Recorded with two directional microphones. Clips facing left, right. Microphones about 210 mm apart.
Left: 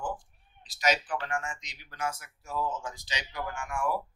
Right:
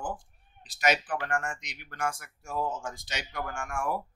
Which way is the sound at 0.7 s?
55° right (ahead or behind).